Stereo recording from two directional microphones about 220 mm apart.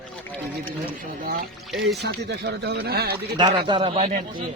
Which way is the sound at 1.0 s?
40° right (ahead or behind).